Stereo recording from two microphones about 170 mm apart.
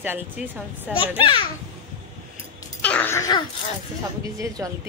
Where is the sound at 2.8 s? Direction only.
10° left (ahead or behind).